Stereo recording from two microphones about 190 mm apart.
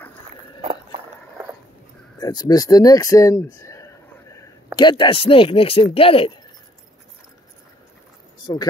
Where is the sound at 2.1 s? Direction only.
20° left (ahead or behind).